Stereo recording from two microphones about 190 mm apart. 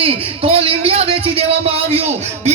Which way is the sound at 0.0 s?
30° right (ahead or behind).